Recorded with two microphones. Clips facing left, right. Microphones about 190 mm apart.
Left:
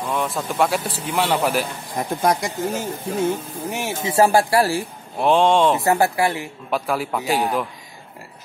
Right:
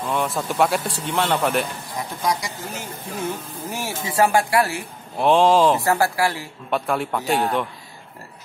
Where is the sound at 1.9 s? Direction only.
55° left (ahead or behind).